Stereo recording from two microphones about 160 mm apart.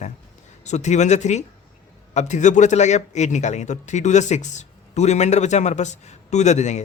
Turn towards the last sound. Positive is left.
turn(degrees=45)  # may be behind; listen again after turning